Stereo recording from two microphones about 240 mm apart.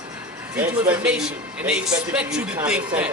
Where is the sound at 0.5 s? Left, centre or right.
Centre.